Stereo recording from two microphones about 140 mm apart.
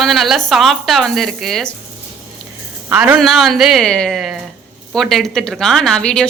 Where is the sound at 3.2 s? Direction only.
Centre (ahead or behind).